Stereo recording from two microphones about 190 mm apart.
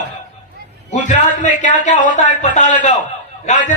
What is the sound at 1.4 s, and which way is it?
A man's voice, 40° left (ahead or behind).